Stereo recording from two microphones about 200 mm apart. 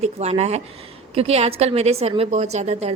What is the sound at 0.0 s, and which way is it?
A woman's voice, 35° right (ahead or behind).